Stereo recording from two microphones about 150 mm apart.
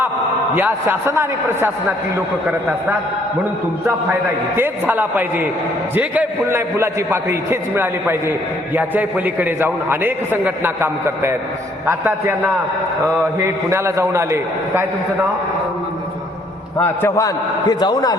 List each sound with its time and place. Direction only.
0.5 s a man's voice: 15° right (ahead or behind)
3.8 s a man's voice: 15° right (ahead or behind)
16.7 s a man's voice: 20° left (ahead or behind)